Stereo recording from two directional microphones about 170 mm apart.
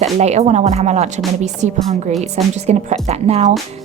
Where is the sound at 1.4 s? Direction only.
45° right (ahead or behind).